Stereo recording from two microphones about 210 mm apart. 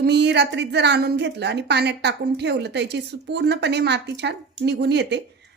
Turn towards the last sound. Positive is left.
turn(degrees=-55)  # may be behind; listen again after turning